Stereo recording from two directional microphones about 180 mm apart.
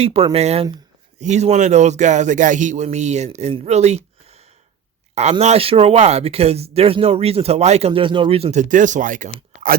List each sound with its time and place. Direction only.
0.0 s speech: 30° right (ahead or behind)